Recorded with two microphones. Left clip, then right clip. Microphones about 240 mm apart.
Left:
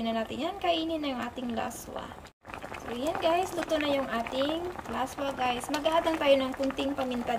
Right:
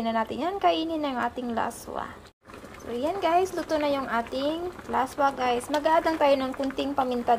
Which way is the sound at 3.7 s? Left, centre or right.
Centre.